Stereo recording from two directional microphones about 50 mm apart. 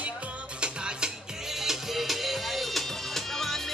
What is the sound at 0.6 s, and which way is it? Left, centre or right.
Music, centre.